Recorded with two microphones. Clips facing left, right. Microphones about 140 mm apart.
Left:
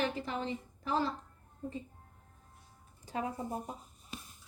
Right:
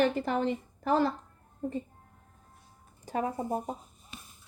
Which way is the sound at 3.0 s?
45° right (ahead or behind).